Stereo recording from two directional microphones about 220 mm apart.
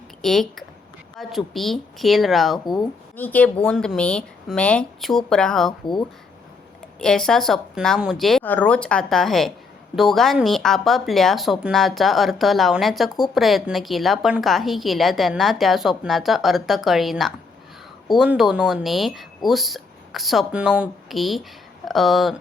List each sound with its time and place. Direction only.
0.2 s speech: centre (ahead or behind)
2.6 s speech: 20° left (ahead or behind)
3.2 s speech: 10° left (ahead or behind)
5.8 s speech: 20° left (ahead or behind)
7.0 s speech: 5° left (ahead or behind)